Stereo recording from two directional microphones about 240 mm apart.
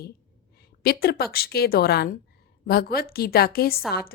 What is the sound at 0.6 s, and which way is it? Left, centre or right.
A woman's voice, left.